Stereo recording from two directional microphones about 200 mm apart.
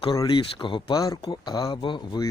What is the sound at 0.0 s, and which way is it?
Speech, 25° left (ahead or behind).